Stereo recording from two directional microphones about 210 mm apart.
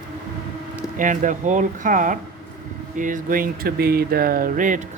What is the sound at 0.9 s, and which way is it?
Speech, 40° right (ahead or behind).